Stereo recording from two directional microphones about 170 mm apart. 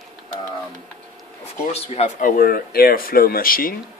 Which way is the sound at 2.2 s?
60° left (ahead or behind).